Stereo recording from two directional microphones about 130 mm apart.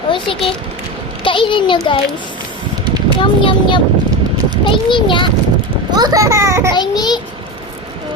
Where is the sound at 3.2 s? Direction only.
40° left (ahead or behind).